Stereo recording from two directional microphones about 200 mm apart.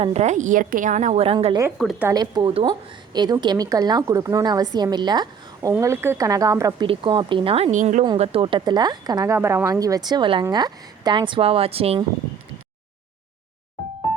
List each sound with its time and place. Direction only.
0.0 s a woman's voice: 35° right (ahead or behind)
1.8 s a woman's voice: centre (ahead or behind)
2.0 s a woman's voice: 20° right (ahead or behind); by 8.0 s 40° right (ahead or behind)
8.0 s a woman's voice: 25° right (ahead or behind)